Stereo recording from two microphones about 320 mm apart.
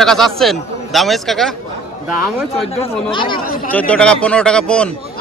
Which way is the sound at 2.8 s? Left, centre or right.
Centre.